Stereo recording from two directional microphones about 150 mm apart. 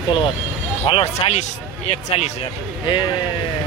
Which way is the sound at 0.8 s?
40° left (ahead or behind).